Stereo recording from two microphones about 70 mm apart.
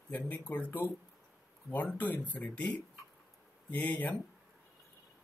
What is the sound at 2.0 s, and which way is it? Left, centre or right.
Speech, left.